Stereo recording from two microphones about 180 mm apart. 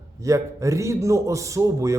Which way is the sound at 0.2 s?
15° right (ahead or behind).